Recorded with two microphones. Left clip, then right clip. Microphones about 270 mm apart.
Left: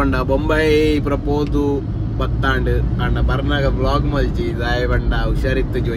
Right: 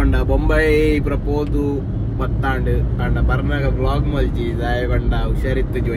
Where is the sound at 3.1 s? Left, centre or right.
Centre.